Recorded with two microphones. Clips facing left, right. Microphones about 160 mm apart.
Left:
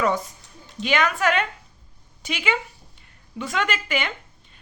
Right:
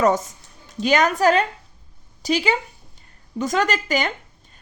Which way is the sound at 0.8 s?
40° right (ahead or behind).